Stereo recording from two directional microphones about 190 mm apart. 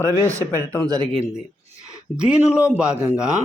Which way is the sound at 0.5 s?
10° left (ahead or behind).